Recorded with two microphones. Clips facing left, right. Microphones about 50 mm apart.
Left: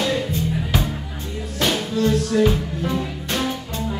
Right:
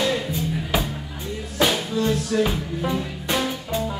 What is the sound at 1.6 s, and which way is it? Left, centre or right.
Music, centre.